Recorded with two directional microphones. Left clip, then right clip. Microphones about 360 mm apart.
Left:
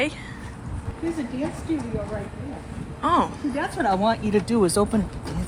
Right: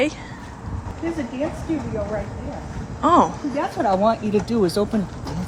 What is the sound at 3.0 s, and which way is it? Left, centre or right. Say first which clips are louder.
Speech: right 5 dB; centre.